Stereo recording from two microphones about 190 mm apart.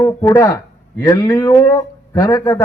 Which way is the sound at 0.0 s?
15° left (ahead or behind).